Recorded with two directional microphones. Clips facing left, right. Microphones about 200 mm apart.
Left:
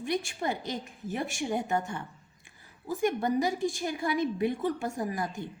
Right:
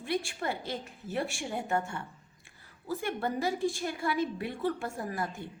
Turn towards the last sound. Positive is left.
turn(degrees=15)  # may be behind; listen again after turning